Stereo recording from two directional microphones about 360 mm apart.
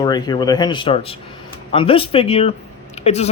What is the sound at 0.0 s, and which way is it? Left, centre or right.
Speech, centre.